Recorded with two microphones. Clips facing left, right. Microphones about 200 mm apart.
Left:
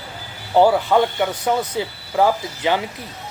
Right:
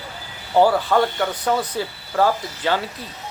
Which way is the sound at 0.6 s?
15° left (ahead or behind).